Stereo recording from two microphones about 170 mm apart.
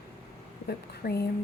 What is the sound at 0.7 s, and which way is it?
Speech, 70° left (ahead or behind).